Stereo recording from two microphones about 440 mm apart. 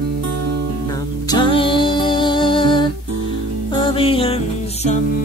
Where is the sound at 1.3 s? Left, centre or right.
Centre.